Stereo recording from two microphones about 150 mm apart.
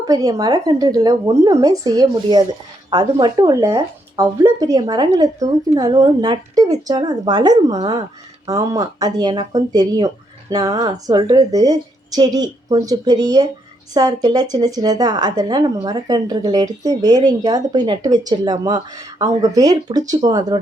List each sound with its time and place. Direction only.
0.0 s speech: 25° right (ahead or behind)